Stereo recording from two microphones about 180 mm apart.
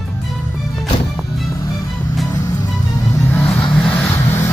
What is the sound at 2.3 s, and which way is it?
Vehicle, 15° left (ahead or behind).